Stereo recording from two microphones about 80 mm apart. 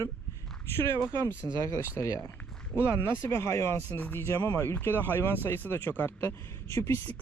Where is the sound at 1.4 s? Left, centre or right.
Right.